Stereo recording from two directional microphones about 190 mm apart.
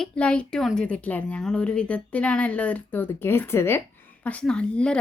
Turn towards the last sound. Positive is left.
turn(degrees=5)  # may be behind; listen again after turning